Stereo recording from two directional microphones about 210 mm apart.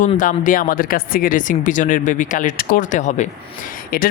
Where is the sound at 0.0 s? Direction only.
40° left (ahead or behind).